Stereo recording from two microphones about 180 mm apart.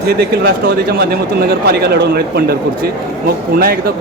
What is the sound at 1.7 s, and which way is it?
Speech, 60° right (ahead or behind).